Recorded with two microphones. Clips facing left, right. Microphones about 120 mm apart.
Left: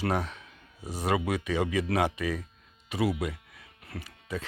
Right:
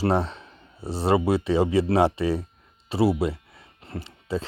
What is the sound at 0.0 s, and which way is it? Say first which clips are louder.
Speech: right 6 dB; 30° right (ahead or behind).